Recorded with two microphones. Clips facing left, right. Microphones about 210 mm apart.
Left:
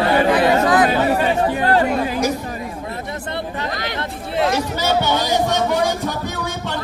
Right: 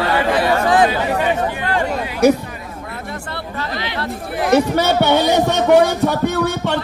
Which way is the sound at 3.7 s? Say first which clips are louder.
Right 1 dB; 45° left (ahead or behind).